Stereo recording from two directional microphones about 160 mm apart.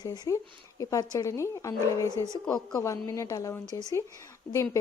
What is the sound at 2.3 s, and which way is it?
Speech, 20° left (ahead or behind).